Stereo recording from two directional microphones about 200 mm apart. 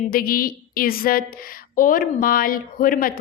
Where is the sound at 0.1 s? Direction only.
45° left (ahead or behind).